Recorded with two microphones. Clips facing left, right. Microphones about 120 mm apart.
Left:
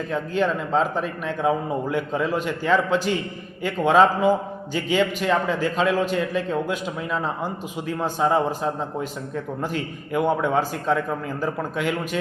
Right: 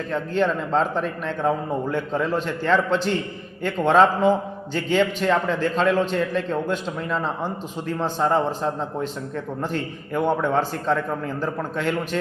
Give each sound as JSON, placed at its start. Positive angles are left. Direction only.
{"t": 0.1, "sound": "a man's voice", "side_deg": 5}